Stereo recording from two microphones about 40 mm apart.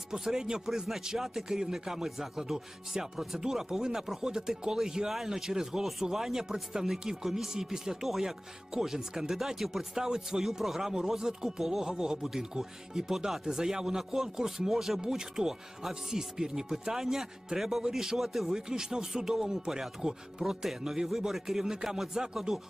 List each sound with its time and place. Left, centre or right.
0.1 s speech: centre
0.7 s music: centre
1.0 s speech: centre
18.7 s speech: centre